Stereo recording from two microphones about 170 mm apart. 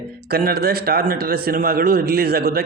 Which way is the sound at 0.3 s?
65° right (ahead or behind).